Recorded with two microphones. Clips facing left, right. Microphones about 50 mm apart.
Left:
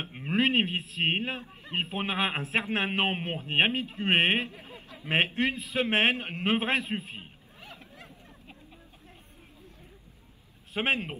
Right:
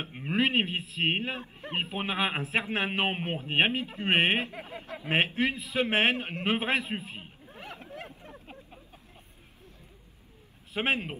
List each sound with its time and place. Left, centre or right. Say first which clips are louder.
0.0 s a man's voice: left 1 dB; centre
1.4 s a man's voice: right 1 dB; right
1.8 s a man's voice: left 1 dB; centre
4.5 s snicker: right 6 dB; right
5.1 s a man's voice: even; centre
7.5 s a sound: right 7 dB; right
10.7 s a man's voice: even; centre